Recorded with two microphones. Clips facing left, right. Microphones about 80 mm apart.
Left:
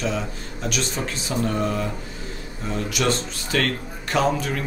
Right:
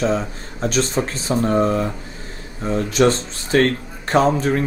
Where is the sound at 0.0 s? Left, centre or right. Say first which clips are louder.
Right 6 dB; right.